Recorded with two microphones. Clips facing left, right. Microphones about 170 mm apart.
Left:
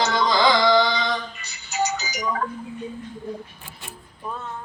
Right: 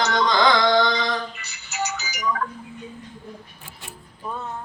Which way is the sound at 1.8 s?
35° left (ahead or behind).